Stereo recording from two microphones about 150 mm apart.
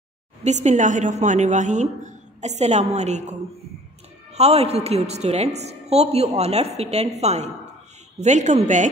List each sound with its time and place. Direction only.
0.4 s a woman's voice: 50° right (ahead or behind)